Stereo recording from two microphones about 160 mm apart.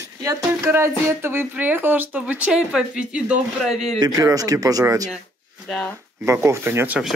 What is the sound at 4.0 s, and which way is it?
Speech, 20° right (ahead or behind).